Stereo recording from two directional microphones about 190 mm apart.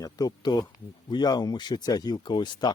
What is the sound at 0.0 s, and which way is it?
Speech, 20° left (ahead or behind).